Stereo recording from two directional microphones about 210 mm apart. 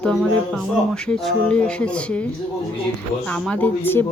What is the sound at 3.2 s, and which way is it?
Speech, 5° left (ahead or behind).